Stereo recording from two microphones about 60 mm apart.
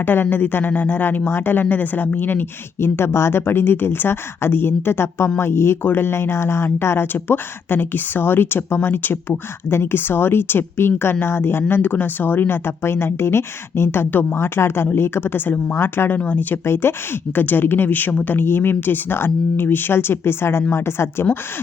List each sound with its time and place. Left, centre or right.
0.0 s speech: left
16.6 s speech: left